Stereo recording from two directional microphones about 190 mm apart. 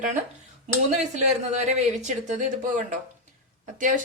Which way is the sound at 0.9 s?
35° right (ahead or behind).